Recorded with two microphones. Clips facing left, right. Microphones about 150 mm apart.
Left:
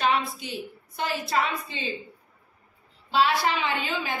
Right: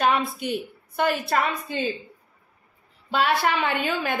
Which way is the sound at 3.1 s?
55° right (ahead or behind).